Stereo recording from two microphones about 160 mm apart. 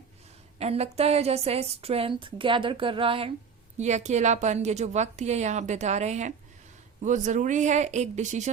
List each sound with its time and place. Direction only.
0.6 s a woman's voice: 40° right (ahead or behind)
3.8 s a woman's voice: 45° right (ahead or behind)